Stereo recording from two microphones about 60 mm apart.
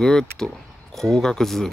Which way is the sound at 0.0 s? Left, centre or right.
Centre.